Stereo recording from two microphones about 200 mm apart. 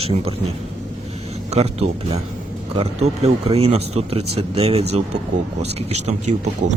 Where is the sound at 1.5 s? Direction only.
30° right (ahead or behind).